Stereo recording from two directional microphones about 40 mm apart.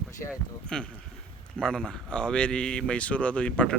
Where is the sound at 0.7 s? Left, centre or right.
Centre.